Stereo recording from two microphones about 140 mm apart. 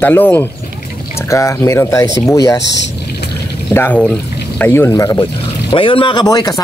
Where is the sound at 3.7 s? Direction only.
15° left (ahead or behind).